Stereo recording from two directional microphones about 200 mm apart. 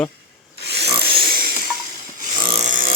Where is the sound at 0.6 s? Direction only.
55° right (ahead or behind).